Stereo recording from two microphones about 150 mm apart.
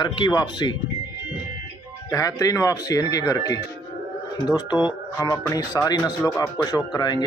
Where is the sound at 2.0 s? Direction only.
20° left (ahead or behind).